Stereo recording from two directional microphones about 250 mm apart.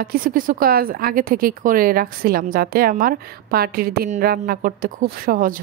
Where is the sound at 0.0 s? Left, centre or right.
Right.